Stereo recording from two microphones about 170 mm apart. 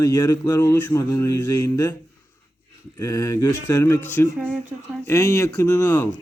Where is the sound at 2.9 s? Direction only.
20° left (ahead or behind).